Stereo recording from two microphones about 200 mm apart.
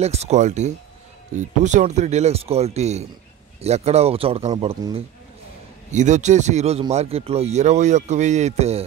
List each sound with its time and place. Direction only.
0.0 s a man's voice: 30° right (ahead or behind)